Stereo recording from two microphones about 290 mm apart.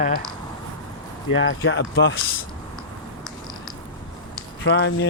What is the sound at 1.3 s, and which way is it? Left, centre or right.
Speech, left.